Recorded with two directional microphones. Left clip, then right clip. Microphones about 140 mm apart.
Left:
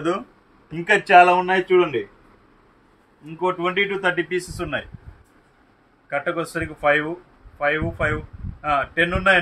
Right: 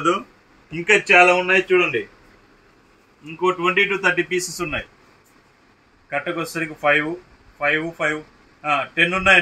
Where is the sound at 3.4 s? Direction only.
55° left (ahead or behind).